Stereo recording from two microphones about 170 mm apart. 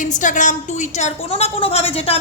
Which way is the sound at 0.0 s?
50° left (ahead or behind).